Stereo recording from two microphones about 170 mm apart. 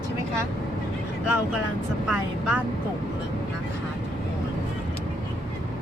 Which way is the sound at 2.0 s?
5° right (ahead or behind).